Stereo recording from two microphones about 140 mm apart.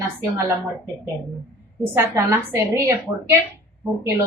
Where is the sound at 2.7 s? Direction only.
15° right (ahead or behind).